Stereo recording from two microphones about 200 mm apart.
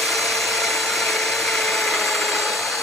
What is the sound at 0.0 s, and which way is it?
Tools, centre (ahead or behind).